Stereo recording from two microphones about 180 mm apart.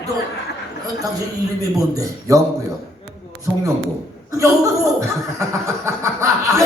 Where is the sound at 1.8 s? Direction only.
20° right (ahead or behind).